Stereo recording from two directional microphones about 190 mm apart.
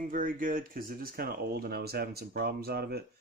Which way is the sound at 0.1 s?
45° right (ahead or behind).